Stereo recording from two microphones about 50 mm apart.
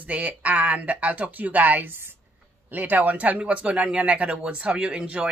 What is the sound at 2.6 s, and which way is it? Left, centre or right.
Speech, right.